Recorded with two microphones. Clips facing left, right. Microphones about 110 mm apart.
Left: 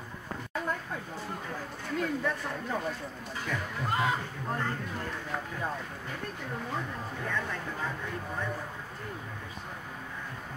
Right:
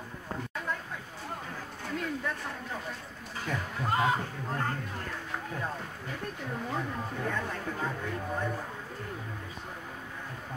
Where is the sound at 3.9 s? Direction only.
30° right (ahead or behind).